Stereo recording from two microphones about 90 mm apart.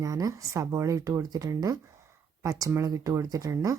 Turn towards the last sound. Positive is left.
turn(degrees=-40)  # may be behind; listen again after turning